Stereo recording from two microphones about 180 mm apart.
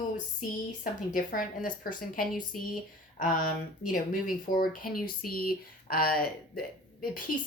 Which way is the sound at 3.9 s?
50° left (ahead or behind).